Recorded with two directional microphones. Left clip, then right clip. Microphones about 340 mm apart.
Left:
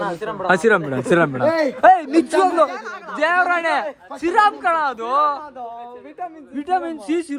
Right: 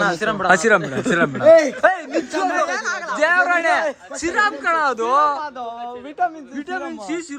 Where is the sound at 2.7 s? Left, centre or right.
Right.